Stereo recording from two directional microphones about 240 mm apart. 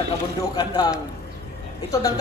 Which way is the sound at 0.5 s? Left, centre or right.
Centre.